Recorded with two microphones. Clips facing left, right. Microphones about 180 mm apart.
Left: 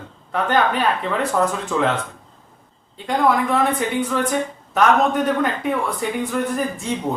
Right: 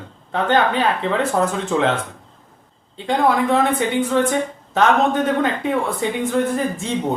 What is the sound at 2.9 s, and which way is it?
A woman's voice, 25° right (ahead or behind).